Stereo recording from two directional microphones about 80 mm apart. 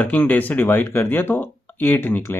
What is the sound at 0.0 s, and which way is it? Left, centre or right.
Speech, left.